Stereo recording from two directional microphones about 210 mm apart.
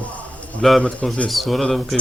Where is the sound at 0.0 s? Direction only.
5° left (ahead or behind).